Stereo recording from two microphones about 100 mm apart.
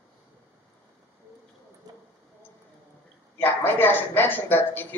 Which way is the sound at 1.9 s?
40° right (ahead or behind).